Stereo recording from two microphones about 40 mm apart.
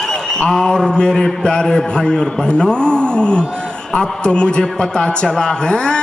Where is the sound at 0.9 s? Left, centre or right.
Centre.